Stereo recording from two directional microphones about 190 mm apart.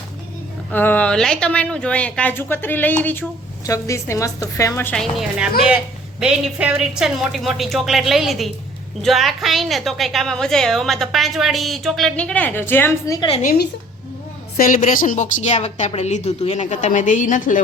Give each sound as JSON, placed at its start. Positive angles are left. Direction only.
{"t": 0.7, "sound": "a woman's voice", "side_deg": 10}
{"t": 5.4, "sound": "a woman's voice", "side_deg": -5}
{"t": 13.1, "sound": "a woman's voice", "side_deg": 30}
{"t": 13.4, "sound": "a woman's voice", "side_deg": 50}